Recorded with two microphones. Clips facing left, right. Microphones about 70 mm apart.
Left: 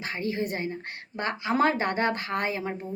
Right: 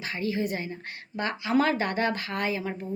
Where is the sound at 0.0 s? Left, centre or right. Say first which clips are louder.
Right 1 dB; left.